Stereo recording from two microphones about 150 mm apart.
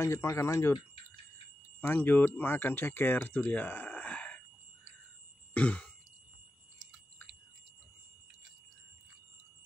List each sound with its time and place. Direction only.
0.0 s speech: 20° left (ahead or behind)
1.8 s speech: 15° left (ahead or behind)
5.5 s throat clearing: 10° left (ahead or behind)